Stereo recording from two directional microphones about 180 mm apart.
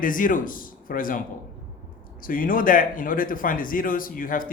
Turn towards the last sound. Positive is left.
turn(degrees=50)  # may be behind; listen again after turning